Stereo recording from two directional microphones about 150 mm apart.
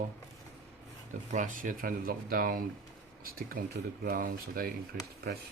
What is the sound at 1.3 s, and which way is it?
Speech, 60° right (ahead or behind).